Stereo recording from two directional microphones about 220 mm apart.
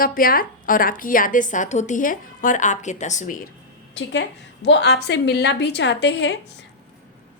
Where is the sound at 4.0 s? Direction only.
55° left (ahead or behind).